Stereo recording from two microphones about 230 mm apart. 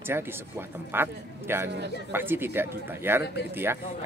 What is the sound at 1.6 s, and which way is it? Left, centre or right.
Speech, right.